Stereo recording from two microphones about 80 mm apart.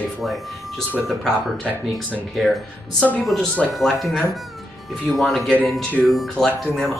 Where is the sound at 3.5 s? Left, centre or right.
Centre.